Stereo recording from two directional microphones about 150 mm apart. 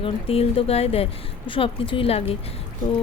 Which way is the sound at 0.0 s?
40° left (ahead or behind).